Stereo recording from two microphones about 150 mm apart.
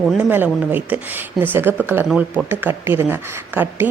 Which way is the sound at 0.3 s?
10° right (ahead or behind).